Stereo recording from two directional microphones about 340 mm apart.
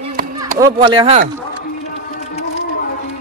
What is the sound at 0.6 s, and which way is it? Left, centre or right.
Speech, centre.